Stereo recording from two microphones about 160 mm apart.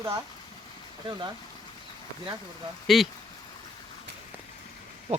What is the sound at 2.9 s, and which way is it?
Speech, centre (ahead or behind).